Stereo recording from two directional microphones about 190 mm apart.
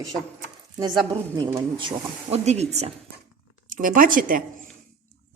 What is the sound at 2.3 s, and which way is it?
Speech, 35° right (ahead or behind).